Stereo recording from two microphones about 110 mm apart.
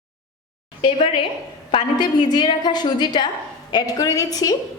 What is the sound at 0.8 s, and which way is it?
A woman's voice, 50° left (ahead or behind).